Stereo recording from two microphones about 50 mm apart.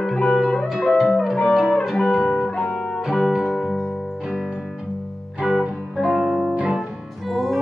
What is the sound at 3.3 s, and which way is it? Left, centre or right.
Music, centre.